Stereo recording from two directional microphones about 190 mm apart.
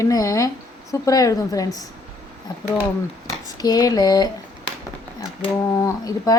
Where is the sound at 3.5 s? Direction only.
20° left (ahead or behind).